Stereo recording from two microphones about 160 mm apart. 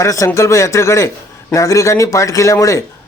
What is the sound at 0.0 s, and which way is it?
A man's voice, 20° left (ahead or behind).